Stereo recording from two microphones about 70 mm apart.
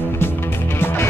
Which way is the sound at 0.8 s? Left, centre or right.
Left.